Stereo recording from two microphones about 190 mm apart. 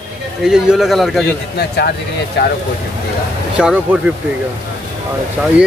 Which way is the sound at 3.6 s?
5° right (ahead or behind).